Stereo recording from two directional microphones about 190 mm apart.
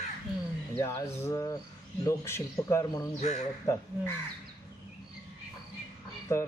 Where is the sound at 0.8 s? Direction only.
15° left (ahead or behind).